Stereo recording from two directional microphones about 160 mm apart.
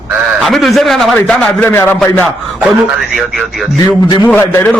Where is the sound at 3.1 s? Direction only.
Centre (ahead or behind).